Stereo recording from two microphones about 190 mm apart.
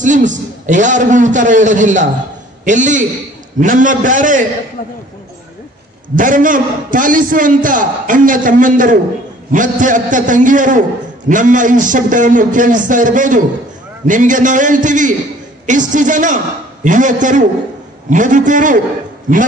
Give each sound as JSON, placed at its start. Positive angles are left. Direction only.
{"t": 0.0, "sound": "a man's voice", "side_deg": -40}
{"t": 6.1, "sound": "a man's voice", "side_deg": -45}